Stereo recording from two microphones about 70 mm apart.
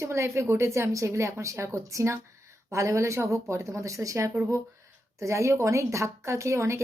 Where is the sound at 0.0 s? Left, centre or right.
Right.